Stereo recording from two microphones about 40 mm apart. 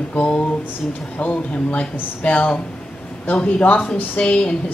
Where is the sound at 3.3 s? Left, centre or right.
Left.